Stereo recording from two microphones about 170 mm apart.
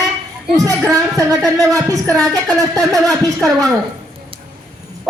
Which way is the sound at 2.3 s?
20° right (ahead or behind).